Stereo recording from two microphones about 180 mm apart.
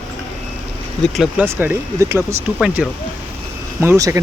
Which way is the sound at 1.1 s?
Centre (ahead or behind).